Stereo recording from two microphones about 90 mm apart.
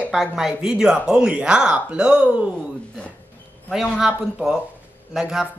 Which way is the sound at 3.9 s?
5° right (ahead or behind).